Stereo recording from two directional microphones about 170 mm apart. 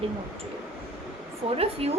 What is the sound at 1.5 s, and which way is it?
Speech, 35° right (ahead or behind).